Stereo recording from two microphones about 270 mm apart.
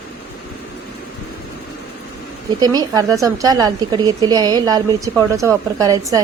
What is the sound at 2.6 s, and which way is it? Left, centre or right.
A woman's voice, centre.